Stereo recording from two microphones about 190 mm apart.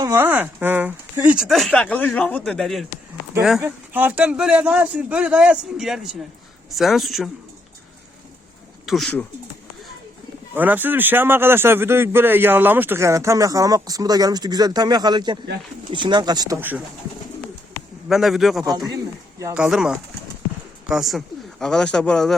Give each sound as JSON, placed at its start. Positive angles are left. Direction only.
{"t": 0.0, "sound": "speech", "side_deg": -10}
{"t": 3.6, "sound": "a man's voice", "side_deg": -10}
{"t": 8.9, "sound": "speech", "side_deg": 5}
{"t": 10.5, "sound": "a man's voice", "side_deg": -10}
{"t": 18.1, "sound": "speech", "side_deg": 0}
{"t": 18.6, "sound": "speech", "side_deg": -20}
{"t": 19.5, "sound": "speech", "side_deg": -5}